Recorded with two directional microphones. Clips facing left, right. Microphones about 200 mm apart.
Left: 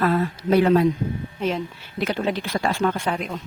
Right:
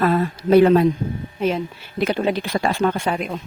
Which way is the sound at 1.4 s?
10° right (ahead or behind).